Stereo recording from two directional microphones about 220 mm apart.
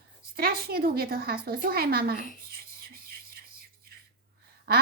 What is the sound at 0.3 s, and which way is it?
A woman's voice, 45° right (ahead or behind).